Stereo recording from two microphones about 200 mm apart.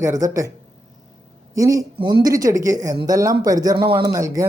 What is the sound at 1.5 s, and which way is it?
Speech, 15° right (ahead or behind).